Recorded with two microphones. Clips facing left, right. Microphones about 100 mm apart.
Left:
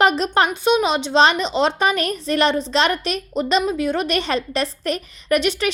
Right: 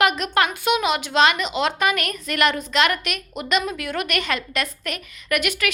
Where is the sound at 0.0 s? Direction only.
30° left (ahead or behind).